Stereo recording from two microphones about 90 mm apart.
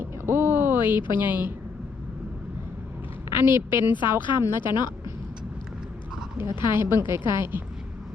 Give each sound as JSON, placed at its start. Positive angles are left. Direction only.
{"t": 0.0, "sound": "a sound", "side_deg": -25}
{"t": 1.2, "sound": "a woman's voice", "side_deg": -20}
{"t": 3.2, "sound": "a woman's voice", "side_deg": -25}
{"t": 6.3, "sound": "a woman's voice", "side_deg": -30}